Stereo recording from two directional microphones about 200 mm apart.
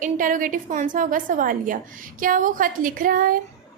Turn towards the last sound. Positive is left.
turn(degrees=-45)  # may be behind; listen again after turning